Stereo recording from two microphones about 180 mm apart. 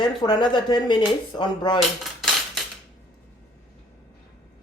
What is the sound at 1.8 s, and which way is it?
Cutlery, centre (ahead or behind).